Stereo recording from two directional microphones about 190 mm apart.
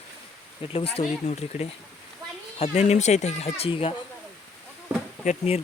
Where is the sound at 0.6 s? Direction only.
30° left (ahead or behind).